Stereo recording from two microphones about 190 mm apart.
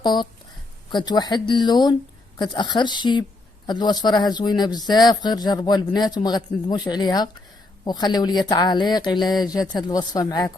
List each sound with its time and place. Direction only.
0.0 s speech: 25° left (ahead or behind)